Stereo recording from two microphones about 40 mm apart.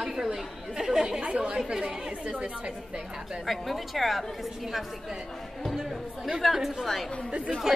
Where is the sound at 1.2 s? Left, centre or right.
Right.